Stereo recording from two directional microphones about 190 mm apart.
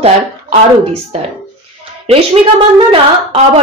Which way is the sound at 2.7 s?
30° right (ahead or behind).